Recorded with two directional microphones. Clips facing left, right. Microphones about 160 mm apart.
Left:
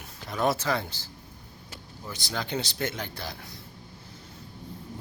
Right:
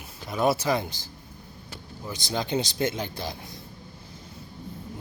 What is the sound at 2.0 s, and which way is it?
Speech, 20° right (ahead or behind).